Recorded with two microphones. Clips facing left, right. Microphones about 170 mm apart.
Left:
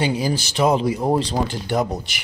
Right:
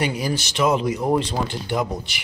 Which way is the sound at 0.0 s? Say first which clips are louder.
Left 2 dB; 30° left (ahead or behind).